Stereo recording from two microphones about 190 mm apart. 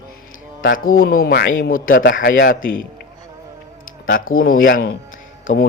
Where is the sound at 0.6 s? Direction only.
50° left (ahead or behind).